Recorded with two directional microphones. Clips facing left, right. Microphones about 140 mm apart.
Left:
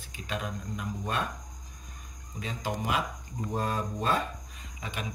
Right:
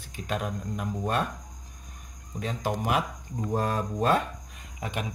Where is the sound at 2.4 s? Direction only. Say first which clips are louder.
Right 4 dB; 60° right (ahead or behind).